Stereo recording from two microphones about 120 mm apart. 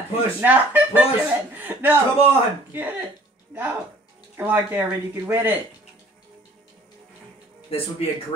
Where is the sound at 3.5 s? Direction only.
15° right (ahead or behind).